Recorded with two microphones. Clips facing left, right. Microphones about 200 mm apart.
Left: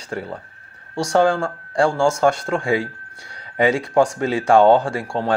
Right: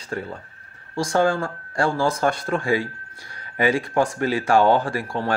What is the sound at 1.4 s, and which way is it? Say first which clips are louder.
Speech: left 4 dB; 30° left (ahead or behind).